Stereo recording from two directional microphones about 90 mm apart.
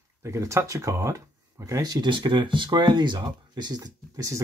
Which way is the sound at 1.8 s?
55° right (ahead or behind).